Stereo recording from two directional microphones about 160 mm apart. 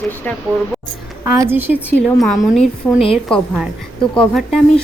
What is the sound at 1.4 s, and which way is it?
Speech, 15° right (ahead or behind).